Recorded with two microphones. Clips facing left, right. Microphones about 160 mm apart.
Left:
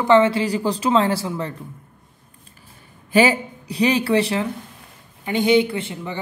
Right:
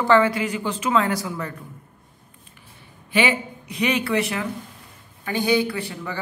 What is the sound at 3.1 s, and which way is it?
Speech, 40° left (ahead or behind).